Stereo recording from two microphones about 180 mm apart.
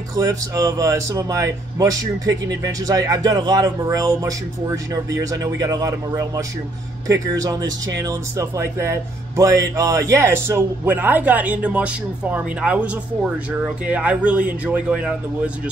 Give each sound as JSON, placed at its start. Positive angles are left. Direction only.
{"t": 0.1, "sound": "a man's voice", "side_deg": -20}